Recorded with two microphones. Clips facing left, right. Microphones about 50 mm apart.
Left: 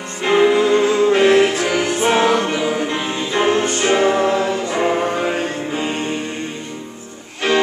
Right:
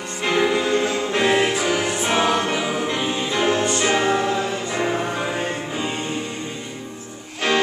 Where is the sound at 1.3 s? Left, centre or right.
Centre.